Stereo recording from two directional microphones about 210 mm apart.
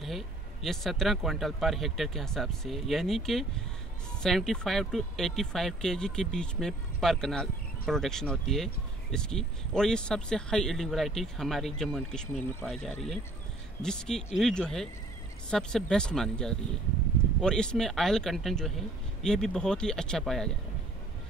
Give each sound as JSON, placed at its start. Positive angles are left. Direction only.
{"t": 0.7, "sound": "speech", "side_deg": 0}